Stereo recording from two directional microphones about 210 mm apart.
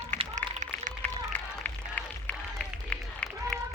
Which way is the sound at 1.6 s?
5° left (ahead or behind).